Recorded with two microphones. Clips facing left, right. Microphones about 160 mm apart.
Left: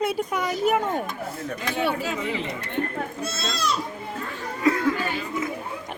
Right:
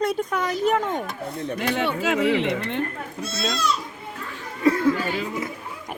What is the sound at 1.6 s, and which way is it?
Speech, 75° right (ahead or behind).